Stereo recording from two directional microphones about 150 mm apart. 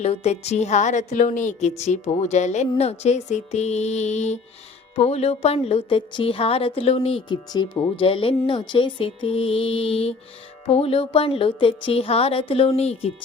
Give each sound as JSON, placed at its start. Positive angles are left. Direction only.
{"t": 0.0, "sound": "music", "side_deg": 45}
{"t": 4.9, "sound": "speech", "side_deg": 45}